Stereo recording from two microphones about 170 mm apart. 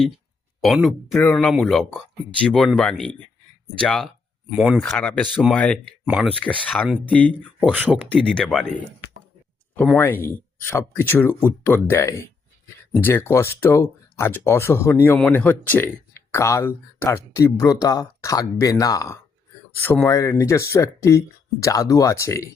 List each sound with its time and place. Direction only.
0.6 s speech: centre (ahead or behind)
9.7 s speech: 5° left (ahead or behind)